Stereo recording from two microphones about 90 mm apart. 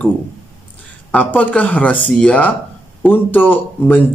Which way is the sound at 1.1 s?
15° left (ahead or behind).